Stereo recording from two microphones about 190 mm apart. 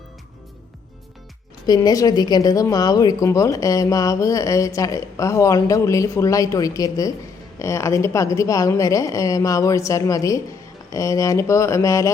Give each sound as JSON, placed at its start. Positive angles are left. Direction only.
{"t": 1.6, "sound": "speech", "side_deg": 20}